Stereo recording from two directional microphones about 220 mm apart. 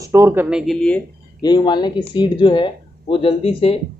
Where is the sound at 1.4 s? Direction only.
20° left (ahead or behind).